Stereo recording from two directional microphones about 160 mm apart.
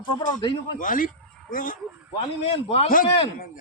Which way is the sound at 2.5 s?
40° left (ahead or behind).